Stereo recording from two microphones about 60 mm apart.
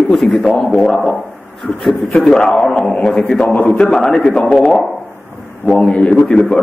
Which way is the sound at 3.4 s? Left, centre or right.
Left.